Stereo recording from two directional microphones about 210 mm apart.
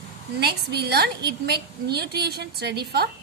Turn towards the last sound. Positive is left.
turn(degrees=-50)  # may be behind; listen again after turning